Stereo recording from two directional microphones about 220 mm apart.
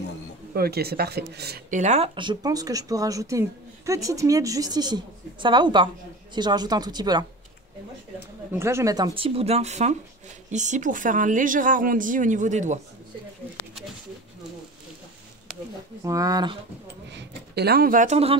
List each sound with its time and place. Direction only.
0.6 s speech: 45° right (ahead or behind)
1.8 s speech: 30° right (ahead or behind)
8.5 s speech: 10° right (ahead or behind); by 12.8 s 35° right (ahead or behind)
16.0 s speech: 15° right (ahead or behind)
17.1 s speech: 50° right (ahead or behind); by 18.4 s 30° right (ahead or behind)